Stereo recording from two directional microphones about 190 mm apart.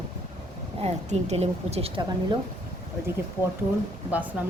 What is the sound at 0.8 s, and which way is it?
Speech, 35° right (ahead or behind).